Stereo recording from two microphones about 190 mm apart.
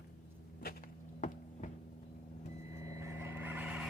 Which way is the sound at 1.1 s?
40° left (ahead or behind).